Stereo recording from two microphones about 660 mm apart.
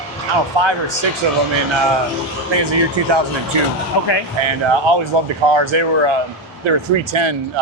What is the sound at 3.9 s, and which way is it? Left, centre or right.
Speech, left.